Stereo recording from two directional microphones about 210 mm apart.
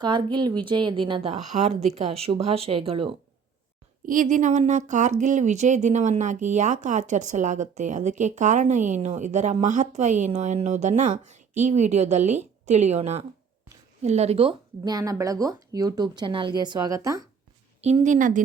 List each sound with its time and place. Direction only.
0.0 s speech: 20° right (ahead or behind)
4.0 s speech: 40° right (ahead or behind); by 17.2 s 15° right (ahead or behind)
17.7 s speech: 30° right (ahead or behind)